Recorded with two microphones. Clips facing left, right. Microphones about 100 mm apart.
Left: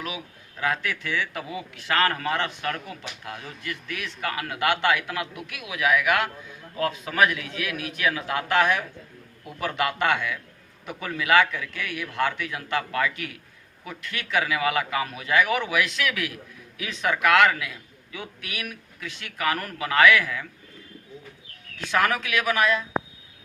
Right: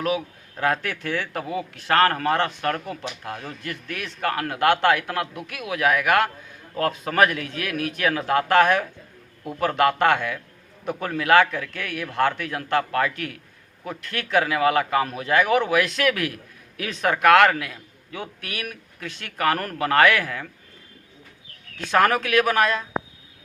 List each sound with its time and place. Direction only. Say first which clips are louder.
0.0 s a man's voice: right 10 dB; 45° right (ahead or behind)
21.8 s a man's voice: right 4 dB; 45° right (ahead or behind)